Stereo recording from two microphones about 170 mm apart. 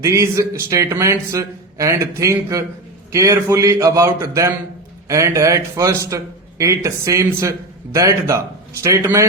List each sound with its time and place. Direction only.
0.0 s speech: 20° right (ahead or behind)